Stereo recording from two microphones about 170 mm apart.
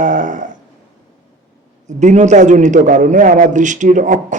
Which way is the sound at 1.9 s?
45° right (ahead or behind).